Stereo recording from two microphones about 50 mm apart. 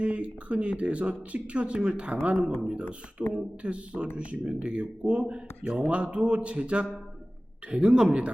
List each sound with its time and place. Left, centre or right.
0.0 s speech: right